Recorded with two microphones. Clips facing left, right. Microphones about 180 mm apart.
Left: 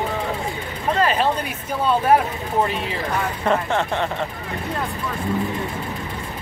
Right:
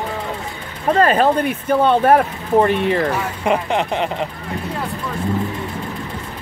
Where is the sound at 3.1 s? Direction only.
10° right (ahead or behind).